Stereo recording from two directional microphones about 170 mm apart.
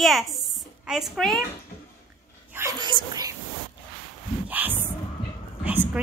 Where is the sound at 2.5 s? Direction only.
15° right (ahead or behind).